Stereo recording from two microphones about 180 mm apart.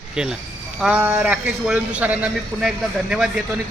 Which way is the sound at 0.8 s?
5° right (ahead or behind).